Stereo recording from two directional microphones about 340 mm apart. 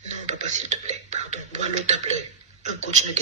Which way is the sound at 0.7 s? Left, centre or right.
Centre.